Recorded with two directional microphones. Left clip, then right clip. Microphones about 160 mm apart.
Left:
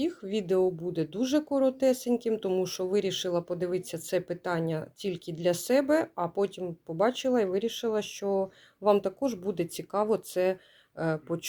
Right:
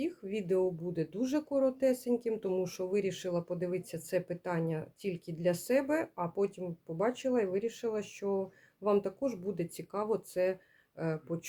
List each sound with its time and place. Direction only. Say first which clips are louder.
0.0 s speech: left 5 dB; 30° left (ahead or behind)